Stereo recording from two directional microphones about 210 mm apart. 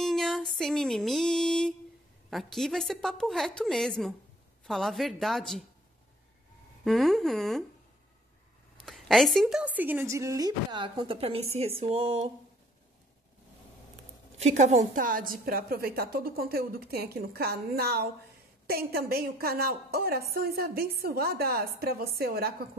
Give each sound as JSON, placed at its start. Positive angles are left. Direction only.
{"t": 0.0, "sound": "music", "side_deg": 0}
{"t": 2.2, "sound": "a woman's voice", "side_deg": 0}
{"t": 6.8, "sound": "a woman's voice", "side_deg": 0}
{"t": 8.8, "sound": "a woman's voice", "side_deg": 0}
{"t": 14.4, "sound": "a woman's voice", "side_deg": -35}